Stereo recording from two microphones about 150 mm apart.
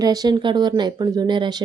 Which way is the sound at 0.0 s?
25° right (ahead or behind).